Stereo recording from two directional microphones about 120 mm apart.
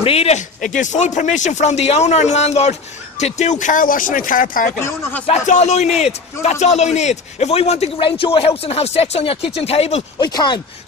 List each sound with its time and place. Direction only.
0.0 s speech: 55° left (ahead or behind); by 4.4 s 90° left
5.2 s speech: 70° left (ahead or behind)
8.0 s speech: 45° left (ahead or behind)
10.1 s speech: 35° left (ahead or behind)